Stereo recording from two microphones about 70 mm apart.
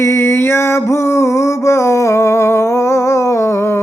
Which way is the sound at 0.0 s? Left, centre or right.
Left.